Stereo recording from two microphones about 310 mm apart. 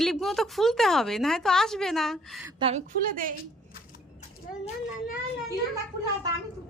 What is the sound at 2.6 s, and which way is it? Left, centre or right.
Speech, right.